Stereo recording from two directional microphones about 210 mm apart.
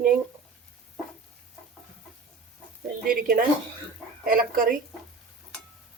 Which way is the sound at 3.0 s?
45° right (ahead or behind).